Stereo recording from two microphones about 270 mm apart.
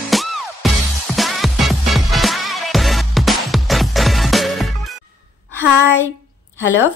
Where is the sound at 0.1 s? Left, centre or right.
Centre.